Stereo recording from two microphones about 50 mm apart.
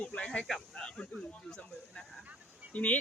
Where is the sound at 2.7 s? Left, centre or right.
Left.